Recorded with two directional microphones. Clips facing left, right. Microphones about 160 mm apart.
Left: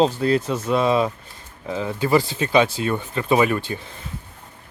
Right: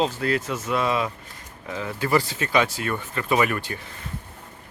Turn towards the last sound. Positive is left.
turn(degrees=25)  # may be behind; listen again after turning